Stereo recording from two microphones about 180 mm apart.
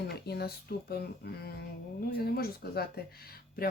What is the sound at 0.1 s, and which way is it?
Speech, 60° left (ahead or behind).